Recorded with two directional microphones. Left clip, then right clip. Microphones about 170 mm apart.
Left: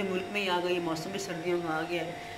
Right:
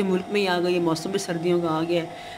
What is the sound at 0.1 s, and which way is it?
Speech, 80° right.